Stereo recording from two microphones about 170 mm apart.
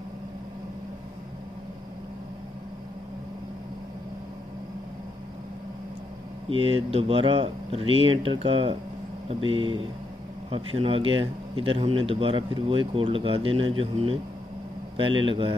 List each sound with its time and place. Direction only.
6.5 s speech: 35° right (ahead or behind)